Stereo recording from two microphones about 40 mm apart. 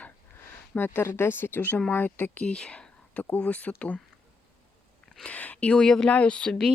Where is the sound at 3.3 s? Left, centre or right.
Left.